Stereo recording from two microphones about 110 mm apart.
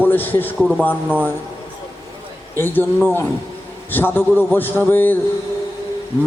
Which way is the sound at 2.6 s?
20° left (ahead or behind).